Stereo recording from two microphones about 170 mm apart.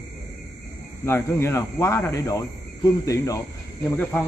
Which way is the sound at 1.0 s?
15° left (ahead or behind).